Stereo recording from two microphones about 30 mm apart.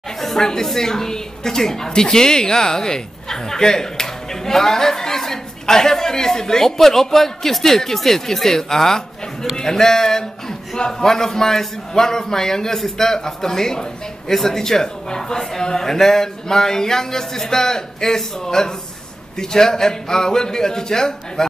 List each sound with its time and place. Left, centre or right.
0.4 s a man's voice: centre
6.6 s a man's voice: centre